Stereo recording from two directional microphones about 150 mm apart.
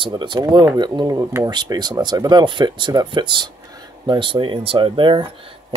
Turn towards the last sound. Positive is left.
turn(degrees=-35)  # may be behind; listen again after turning